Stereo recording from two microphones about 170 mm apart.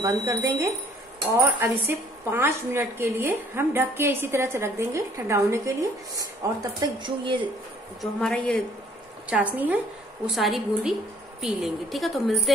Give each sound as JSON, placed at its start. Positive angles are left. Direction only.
{"t": 0.0, "sound": "speech", "side_deg": -15}
{"t": 8.0, "sound": "a woman's voice", "side_deg": 5}
{"t": 9.3, "sound": "a woman's voice", "side_deg": -10}